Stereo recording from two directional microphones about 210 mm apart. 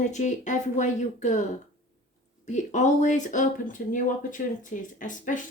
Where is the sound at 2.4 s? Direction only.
35° left (ahead or behind).